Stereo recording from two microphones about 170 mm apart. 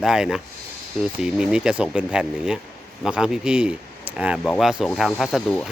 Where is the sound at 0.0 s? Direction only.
5° right (ahead or behind).